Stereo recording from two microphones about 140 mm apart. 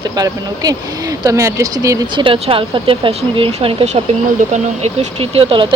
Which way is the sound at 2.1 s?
40° right (ahead or behind).